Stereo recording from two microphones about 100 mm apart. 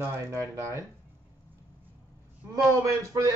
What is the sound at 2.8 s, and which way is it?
Speech, 35° right (ahead or behind).